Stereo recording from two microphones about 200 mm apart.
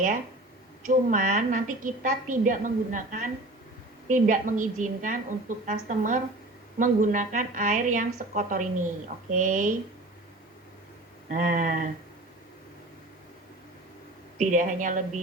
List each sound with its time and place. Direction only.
0.8 s a woman's voice: 40° right (ahead or behind)
11.3 s a woman's voice: 40° right (ahead or behind)
14.3 s a woman's voice: 40° right (ahead or behind)